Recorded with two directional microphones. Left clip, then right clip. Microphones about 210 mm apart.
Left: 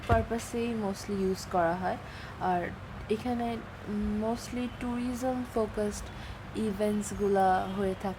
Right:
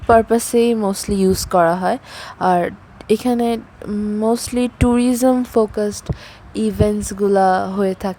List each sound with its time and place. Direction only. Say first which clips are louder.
0.1 s speech: right 17 dB; 50° right (ahead or behind)